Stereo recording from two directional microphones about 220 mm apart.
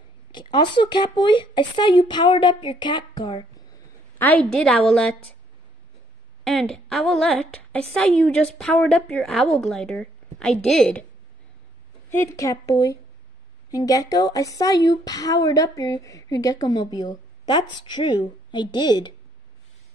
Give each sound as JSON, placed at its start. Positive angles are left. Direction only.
{"t": 0.3, "sound": "speech", "side_deg": 20}
{"t": 4.2, "sound": "a woman's voice", "side_deg": 5}
{"t": 6.4, "sound": "a woman's voice", "side_deg": 0}
{"t": 12.1, "sound": "a woman's voice", "side_deg": 10}